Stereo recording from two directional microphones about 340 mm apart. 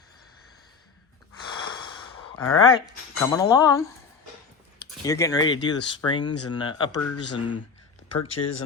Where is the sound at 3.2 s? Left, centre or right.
Centre.